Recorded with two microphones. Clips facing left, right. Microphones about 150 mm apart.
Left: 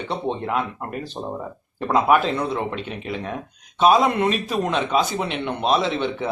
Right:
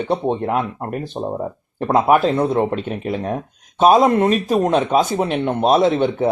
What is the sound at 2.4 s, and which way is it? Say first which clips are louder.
Speech: right 7 dB; 45° right (ahead or behind).